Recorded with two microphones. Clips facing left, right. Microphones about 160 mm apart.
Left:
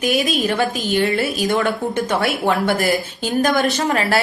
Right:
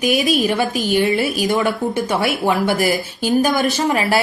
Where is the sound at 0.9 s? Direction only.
15° right (ahead or behind).